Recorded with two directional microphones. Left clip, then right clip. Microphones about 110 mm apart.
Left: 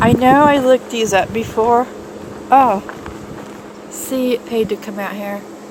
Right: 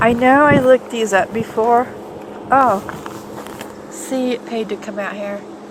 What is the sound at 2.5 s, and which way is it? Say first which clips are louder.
Speech: left 2 dB; 20° left (ahead or behind).